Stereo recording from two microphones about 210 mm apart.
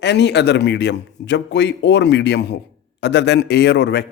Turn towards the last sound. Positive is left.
turn(degrees=55)  # may be behind; listen again after turning